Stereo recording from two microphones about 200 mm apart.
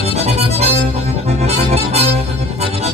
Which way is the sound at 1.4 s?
30° right (ahead or behind).